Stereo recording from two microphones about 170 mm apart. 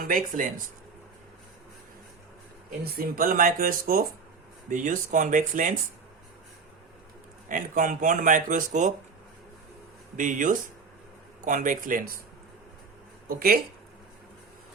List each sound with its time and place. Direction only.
0.0 s speech: 55° right (ahead or behind)
2.6 s speech: 60° right (ahead or behind)
7.4 s speech: 50° right (ahead or behind)
10.2 s speech: 50° right (ahead or behind)
13.2 s speech: 60° right (ahead or behind)